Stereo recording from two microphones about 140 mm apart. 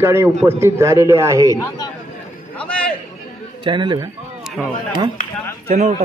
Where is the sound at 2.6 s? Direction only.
10° left (ahead or behind).